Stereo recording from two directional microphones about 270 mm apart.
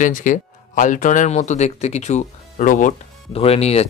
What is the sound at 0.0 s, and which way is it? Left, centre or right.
Speech, left.